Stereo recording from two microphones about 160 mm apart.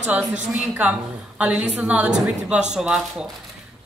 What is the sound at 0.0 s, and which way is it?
A woman's voice, 10° right (ahead or behind).